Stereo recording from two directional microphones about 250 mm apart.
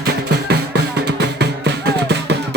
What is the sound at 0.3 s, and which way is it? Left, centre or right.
Music, right.